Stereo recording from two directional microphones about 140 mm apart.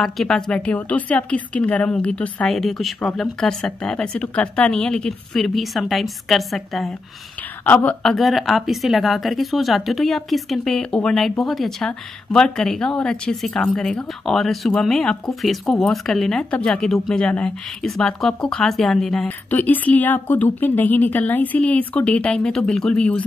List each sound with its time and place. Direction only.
0.0 s a woman's voice: 5° left (ahead or behind)
7.6 s a woman's voice: 10° left (ahead or behind)